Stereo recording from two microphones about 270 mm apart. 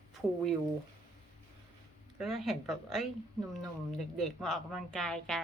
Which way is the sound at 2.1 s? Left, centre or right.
Centre.